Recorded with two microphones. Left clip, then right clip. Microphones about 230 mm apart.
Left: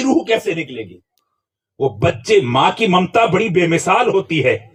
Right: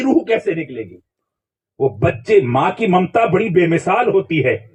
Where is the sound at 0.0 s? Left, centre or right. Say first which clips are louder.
Even; centre.